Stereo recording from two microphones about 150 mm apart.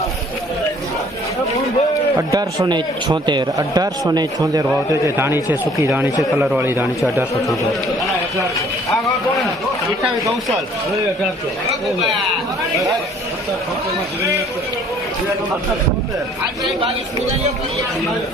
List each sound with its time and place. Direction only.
2.1 s a man's voice: 25° right (ahead or behind)